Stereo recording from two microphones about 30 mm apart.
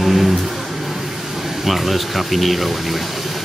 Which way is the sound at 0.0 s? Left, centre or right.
Centre.